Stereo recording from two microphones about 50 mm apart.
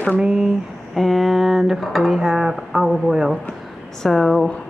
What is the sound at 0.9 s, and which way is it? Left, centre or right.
A woman's voice, centre.